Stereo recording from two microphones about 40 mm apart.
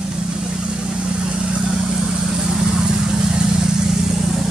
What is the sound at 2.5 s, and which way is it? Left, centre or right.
Vehicle, centre.